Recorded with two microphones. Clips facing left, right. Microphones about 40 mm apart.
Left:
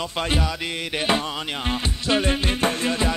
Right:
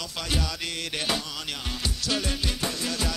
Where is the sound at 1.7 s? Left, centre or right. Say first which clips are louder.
Left 7 dB; left.